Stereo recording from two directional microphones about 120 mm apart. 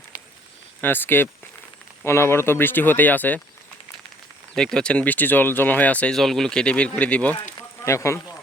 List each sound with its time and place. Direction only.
0.8 s speech: 15° left (ahead or behind)
4.5 s speech: 5° left (ahead or behind)
7.9 s speech: 25° left (ahead or behind)